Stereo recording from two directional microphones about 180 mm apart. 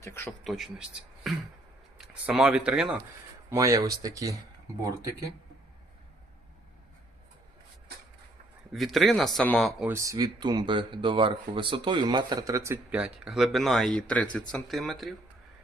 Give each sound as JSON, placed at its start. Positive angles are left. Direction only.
{"t": 0.0, "sound": "speech", "side_deg": 15}
{"t": 0.4, "sound": "speech", "side_deg": 0}
{"t": 3.5, "sound": "speech", "side_deg": -15}
{"t": 8.7, "sound": "speech", "side_deg": 0}
{"t": 9.8, "sound": "speech", "side_deg": -15}